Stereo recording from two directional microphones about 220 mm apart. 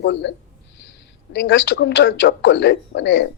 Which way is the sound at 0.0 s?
55° left (ahead or behind).